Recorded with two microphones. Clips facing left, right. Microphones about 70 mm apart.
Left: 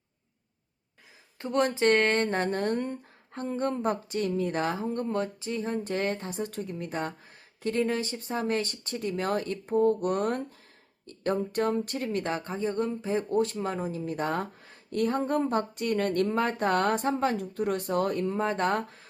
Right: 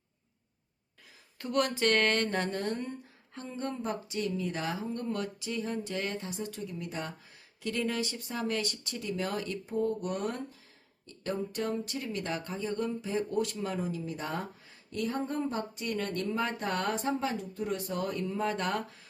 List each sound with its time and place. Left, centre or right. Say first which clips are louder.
1.4 s speech: left 4 dB; left
5.0 s speech: left 4 dB; left
14.0 s speech: left 6 dB; left